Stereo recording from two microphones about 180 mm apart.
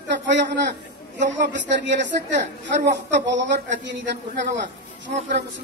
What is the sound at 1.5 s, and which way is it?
Speech, 85° right.